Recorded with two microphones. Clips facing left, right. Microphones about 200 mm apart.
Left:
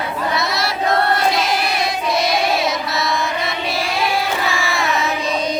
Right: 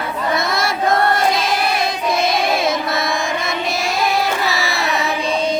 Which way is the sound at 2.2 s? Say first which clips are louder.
Right 1 dB; 50° right (ahead or behind).